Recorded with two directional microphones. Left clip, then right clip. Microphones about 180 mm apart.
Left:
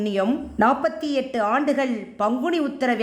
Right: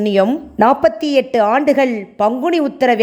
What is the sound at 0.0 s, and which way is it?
A woman's voice, 40° right (ahead or behind).